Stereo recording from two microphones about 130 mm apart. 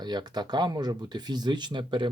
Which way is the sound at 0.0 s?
35° right (ahead or behind).